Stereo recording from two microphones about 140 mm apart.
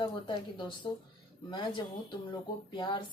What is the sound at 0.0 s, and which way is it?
Speech, 35° left (ahead or behind).